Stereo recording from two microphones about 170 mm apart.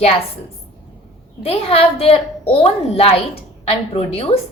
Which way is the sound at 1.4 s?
35° left (ahead or behind).